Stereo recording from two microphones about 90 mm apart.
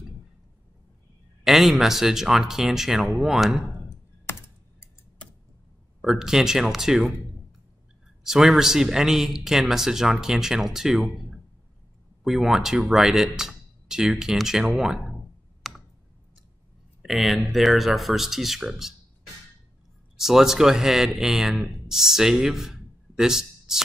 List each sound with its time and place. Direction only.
1.4 s speech: 5° right (ahead or behind)
3.9 s computer keyboard: 30° left (ahead or behind)
5.9 s speech: 5° right (ahead or behind)
8.2 s speech: 5° right (ahead or behind)
15.7 s tick: centre (ahead or behind)
17.0 s speech: centre (ahead or behind)
20.2 s speech: 5° right (ahead or behind)